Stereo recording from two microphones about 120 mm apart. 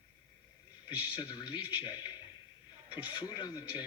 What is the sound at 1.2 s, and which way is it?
Speech, 45° left (ahead or behind).